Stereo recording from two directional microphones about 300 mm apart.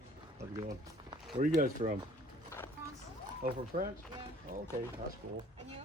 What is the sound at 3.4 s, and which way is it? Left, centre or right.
Speech, right.